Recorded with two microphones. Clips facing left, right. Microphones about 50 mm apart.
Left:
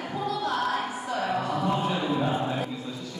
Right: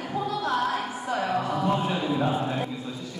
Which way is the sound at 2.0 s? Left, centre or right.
Centre.